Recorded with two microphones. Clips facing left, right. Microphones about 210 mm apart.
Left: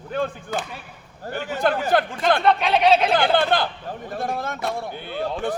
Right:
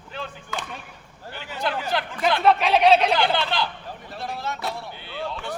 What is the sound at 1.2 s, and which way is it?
Speech, 45° left (ahead or behind).